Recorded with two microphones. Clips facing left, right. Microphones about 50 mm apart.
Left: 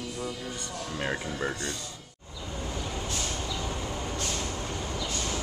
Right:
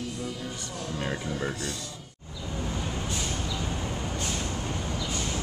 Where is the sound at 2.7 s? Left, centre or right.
Centre.